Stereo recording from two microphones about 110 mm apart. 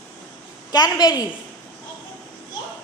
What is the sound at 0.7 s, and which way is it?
Speech, 40° left (ahead or behind).